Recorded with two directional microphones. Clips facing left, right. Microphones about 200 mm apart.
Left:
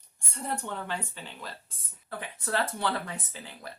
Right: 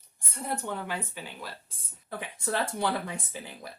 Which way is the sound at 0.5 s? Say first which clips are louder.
Right 1 dB; 10° right (ahead or behind).